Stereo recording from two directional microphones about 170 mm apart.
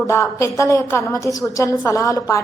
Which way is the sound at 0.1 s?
15° left (ahead or behind).